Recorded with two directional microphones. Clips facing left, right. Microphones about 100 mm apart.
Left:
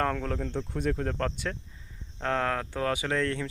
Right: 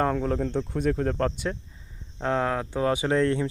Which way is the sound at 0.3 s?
30° right (ahead or behind).